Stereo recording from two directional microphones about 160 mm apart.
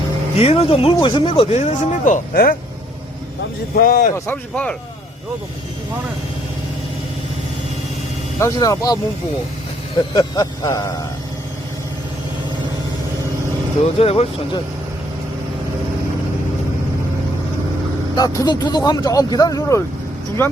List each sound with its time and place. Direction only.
0.3 s speech: 35° left (ahead or behind); by 2.6 s 65° left (ahead or behind)
3.8 s speech: 60° left (ahead or behind)
4.3 s speech: 10° left (ahead or behind)
8.4 s speech: 20° left (ahead or behind)
10.2 s speech: 25° left (ahead or behind)
14.0 s speech: 40° left (ahead or behind)
18.2 s speech: 25° left (ahead or behind)